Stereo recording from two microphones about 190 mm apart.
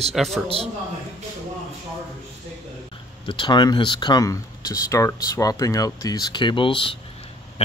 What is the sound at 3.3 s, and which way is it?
Speech, 25° left (ahead or behind).